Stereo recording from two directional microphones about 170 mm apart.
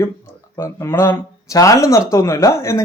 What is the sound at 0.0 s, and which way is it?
Speech, 15° left (ahead or behind).